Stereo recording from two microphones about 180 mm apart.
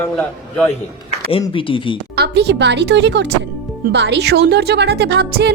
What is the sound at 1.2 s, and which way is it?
Speech, 30° left (ahead or behind).